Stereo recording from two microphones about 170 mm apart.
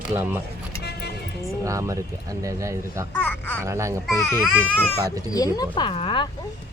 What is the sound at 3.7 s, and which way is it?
Speech, 15° right (ahead or behind).